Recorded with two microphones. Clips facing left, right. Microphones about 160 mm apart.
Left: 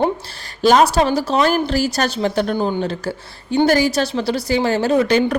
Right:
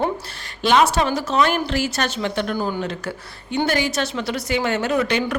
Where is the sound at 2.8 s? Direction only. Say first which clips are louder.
Left 4 dB; 35° left (ahead or behind).